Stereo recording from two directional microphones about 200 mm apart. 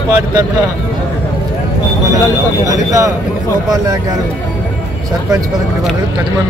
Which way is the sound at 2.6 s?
15° right (ahead or behind).